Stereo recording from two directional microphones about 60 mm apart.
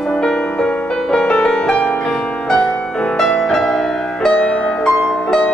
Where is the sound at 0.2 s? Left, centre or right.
Centre.